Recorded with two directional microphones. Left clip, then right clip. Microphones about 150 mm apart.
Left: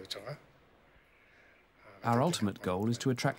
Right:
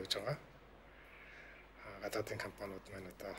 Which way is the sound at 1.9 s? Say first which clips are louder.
Left 12 dB; 60° left (ahead or behind).